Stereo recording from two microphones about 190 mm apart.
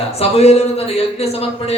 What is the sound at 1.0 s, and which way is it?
Speech, 30° left (ahead or behind).